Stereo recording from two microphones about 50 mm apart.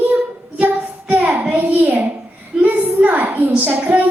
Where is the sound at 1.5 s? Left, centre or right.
Right.